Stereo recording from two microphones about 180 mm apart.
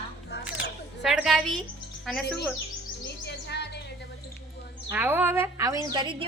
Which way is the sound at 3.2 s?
70° left (ahead or behind).